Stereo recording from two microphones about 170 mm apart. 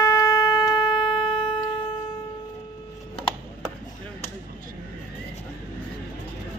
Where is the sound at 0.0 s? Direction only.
20° left (ahead or behind).